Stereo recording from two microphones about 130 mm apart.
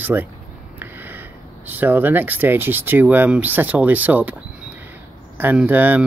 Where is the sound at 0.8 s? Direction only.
15° right (ahead or behind).